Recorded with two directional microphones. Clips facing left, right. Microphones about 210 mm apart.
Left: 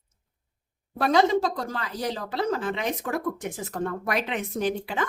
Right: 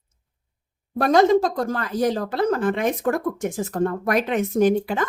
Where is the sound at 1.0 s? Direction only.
45° right (ahead or behind).